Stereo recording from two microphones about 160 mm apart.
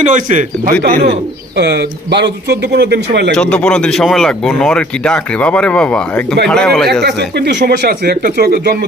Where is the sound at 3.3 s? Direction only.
5° left (ahead or behind).